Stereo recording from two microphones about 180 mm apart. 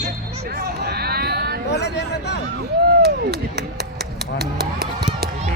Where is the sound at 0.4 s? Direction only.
60° right (ahead or behind).